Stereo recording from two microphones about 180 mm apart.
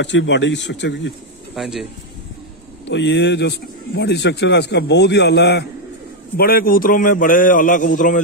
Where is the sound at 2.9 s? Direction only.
75° left (ahead or behind).